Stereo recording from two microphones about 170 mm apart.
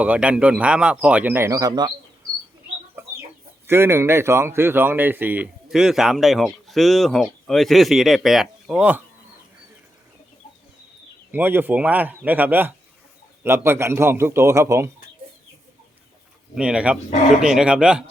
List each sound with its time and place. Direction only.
0.0 s speech: 10° right (ahead or behind); by 1.9 s 25° right (ahead or behind)
3.0 s chicken: 15° right (ahead or behind)
3.7 s speech: 15° right (ahead or behind)
11.3 s speech: 10° right (ahead or behind)
16.6 s speech: 5° right (ahead or behind)